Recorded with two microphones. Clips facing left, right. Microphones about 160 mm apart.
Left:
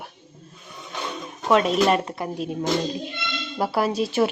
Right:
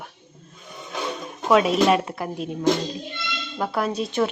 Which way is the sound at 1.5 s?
Centre (ahead or behind).